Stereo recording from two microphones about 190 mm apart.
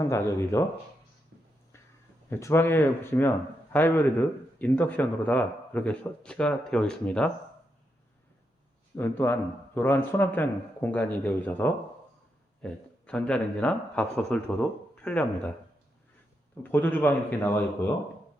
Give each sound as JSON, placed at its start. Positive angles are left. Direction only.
{"t": 0.0, "sound": "speech", "side_deg": 15}
{"t": 1.3, "sound": "a sound", "side_deg": -60}
{"t": 2.3, "sound": "speech", "side_deg": 10}
{"t": 9.0, "sound": "speech", "side_deg": 10}
{"t": 16.6, "sound": "speech", "side_deg": 10}